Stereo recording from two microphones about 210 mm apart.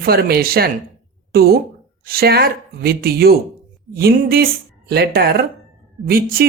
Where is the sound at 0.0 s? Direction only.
45° right (ahead or behind).